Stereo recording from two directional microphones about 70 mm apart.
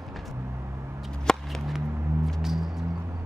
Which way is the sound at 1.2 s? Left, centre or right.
Centre.